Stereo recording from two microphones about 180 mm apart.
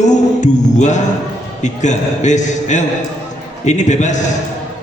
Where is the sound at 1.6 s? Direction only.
40° left (ahead or behind).